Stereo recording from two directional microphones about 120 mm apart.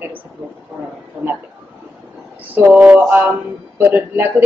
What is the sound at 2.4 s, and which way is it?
Speech, 15° right (ahead or behind).